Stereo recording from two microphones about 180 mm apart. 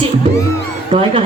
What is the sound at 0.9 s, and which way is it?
Speech, 30° right (ahead or behind).